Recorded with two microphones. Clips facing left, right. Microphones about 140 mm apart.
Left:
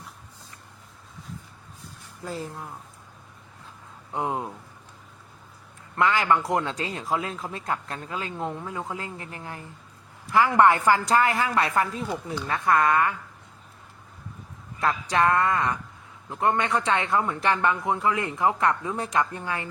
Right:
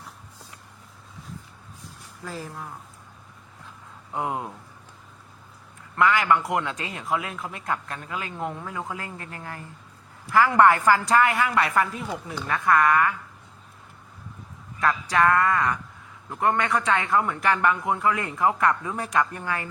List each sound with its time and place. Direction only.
2.2 s speech: 25° left (ahead or behind)
4.1 s speech: 20° left (ahead or behind)
6.0 s speech: 30° left (ahead or behind)
14.8 s speech: 25° left (ahead or behind)